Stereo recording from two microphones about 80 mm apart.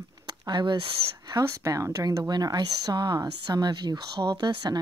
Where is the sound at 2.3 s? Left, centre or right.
Right.